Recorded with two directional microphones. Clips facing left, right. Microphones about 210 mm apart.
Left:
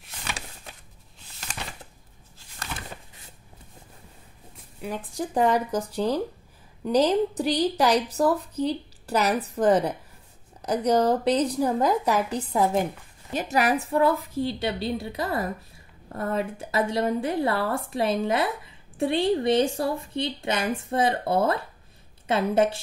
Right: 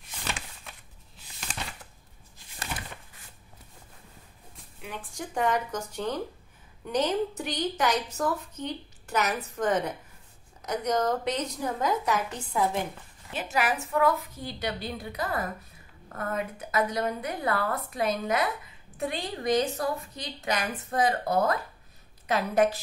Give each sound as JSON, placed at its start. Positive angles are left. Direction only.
{"t": 4.8, "sound": "a woman's voice", "side_deg": 35}